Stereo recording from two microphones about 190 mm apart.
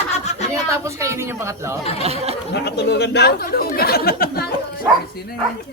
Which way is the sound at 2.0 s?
30° right (ahead or behind).